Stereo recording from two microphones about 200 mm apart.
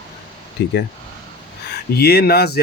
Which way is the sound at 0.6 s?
60° left (ahead or behind).